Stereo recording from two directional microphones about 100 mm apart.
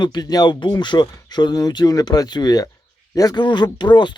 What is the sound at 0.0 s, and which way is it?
Speech, 45° left (ahead or behind).